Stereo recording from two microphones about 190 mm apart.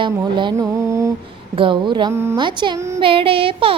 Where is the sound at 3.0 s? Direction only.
30° right (ahead or behind).